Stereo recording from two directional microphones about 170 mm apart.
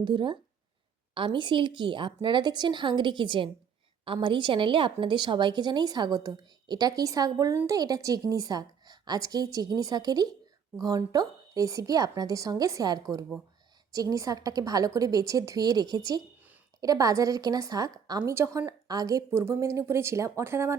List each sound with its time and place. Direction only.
0.0 s a woman's voice: 30° right (ahead or behind)